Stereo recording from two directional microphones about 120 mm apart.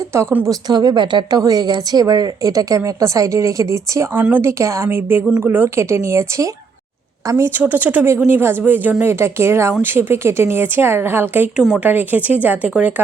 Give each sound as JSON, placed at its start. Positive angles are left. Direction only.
{"t": 0.0, "sound": "a woman's voice", "side_deg": -25}